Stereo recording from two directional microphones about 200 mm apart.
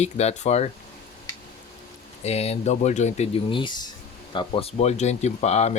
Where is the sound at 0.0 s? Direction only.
35° left (ahead or behind).